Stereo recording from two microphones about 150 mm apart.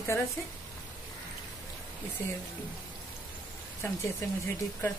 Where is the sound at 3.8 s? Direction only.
20° left (ahead or behind).